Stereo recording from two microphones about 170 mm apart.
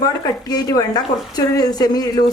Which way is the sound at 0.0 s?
20° left (ahead or behind).